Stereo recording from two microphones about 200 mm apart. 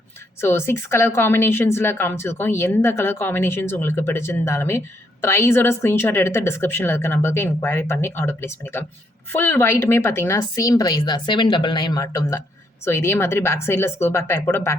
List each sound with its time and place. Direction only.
0.4 s speech: 10° left (ahead or behind)